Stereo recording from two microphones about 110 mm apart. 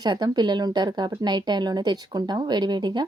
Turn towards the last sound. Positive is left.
turn(degrees=-40)  # may be behind; listen again after turning